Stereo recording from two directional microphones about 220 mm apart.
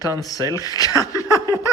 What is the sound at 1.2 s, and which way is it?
Snicker, 15° left (ahead or behind).